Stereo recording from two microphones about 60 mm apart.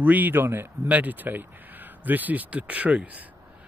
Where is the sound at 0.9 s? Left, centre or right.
Right.